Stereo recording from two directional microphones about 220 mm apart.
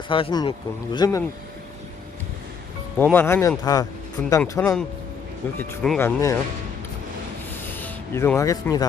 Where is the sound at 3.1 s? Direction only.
10° left (ahead or behind).